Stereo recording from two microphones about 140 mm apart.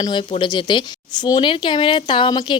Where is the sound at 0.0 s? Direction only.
35° left (ahead or behind).